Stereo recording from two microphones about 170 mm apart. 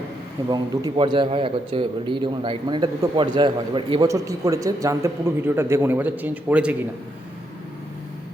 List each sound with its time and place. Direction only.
0.5 s a man's voice: 25° right (ahead or behind)
4.0 s a man's voice: 20° right (ahead or behind)